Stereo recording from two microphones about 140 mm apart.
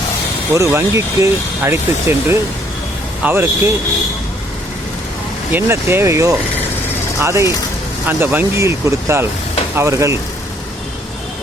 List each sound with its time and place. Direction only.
0.5 s speech: 20° right (ahead or behind)
5.5 s speech: 15° right (ahead or behind)